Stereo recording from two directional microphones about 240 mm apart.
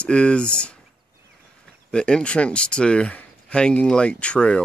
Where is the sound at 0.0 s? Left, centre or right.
Centre.